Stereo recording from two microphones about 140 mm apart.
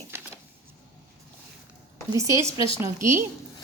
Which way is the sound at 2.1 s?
20° right (ahead or behind).